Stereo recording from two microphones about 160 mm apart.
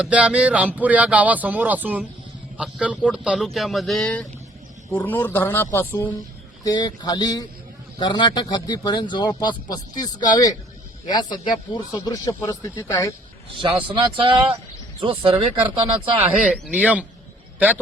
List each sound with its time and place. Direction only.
0.0 s a man's voice: 5° right (ahead or behind); by 6.1 s 10° left (ahead or behind)
6.7 s a man's voice: 25° left (ahead or behind)
13.5 s speech: 30° right (ahead or behind)
16.0 s speech: 10° right (ahead or behind)